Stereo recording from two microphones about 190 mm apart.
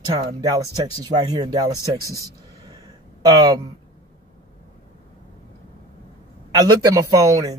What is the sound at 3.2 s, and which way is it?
Speech, 20° right (ahead or behind).